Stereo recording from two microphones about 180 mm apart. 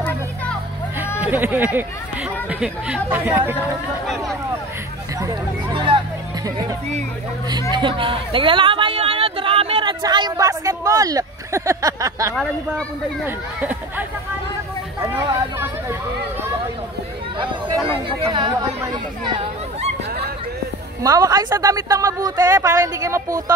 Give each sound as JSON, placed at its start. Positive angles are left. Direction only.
{"t": 1.2, "sound": "speech", "side_deg": -10}
{"t": 5.8, "sound": "music", "side_deg": -25}
{"t": 7.7, "sound": "speech", "side_deg": -30}
{"t": 17.4, "sound": "a woman's voice", "side_deg": -30}
{"t": 21.0, "sound": "a woman's voice", "side_deg": -20}